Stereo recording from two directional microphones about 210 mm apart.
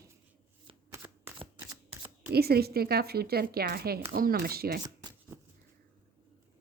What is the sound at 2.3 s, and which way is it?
Speech, 50° right (ahead or behind).